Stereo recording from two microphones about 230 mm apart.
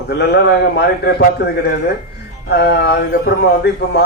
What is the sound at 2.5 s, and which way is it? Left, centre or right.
A man's voice, left.